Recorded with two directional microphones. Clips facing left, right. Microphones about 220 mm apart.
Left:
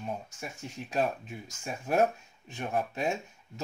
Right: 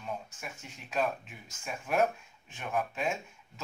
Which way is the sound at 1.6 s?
40° left (ahead or behind).